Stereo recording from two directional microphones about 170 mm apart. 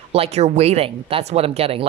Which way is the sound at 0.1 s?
40° right (ahead or behind).